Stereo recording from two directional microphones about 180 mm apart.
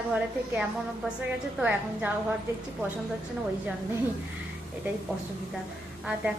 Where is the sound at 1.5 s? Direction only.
5° right (ahead or behind).